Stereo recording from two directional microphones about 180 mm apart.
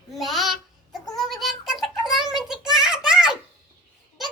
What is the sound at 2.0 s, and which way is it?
Child singing, centre (ahead or behind).